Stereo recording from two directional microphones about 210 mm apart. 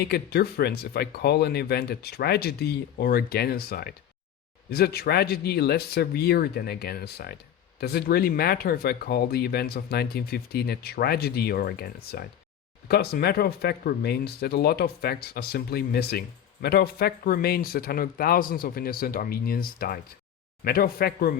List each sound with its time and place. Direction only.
0.1 s speech: 50° left (ahead or behind)